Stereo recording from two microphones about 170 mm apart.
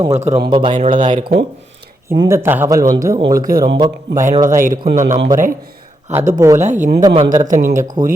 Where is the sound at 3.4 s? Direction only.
55° right (ahead or behind).